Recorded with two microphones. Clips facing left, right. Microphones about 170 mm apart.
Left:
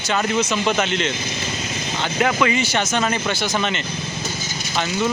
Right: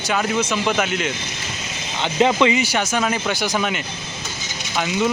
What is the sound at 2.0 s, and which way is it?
Speech, 25° right (ahead or behind).